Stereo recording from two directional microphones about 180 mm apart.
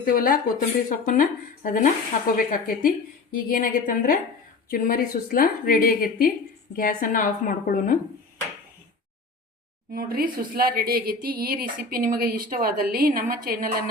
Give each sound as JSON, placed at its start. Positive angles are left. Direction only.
{"t": 0.0, "sound": "a woman's voice", "side_deg": 55}
{"t": 9.9, "sound": "a woman's voice", "side_deg": -55}